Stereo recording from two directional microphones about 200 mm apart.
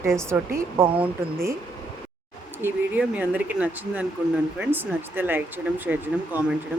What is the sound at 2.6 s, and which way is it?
Speech, 10° right (ahead or behind).